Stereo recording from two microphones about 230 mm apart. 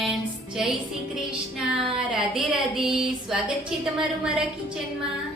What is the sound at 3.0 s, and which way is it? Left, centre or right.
A woman's voice, centre.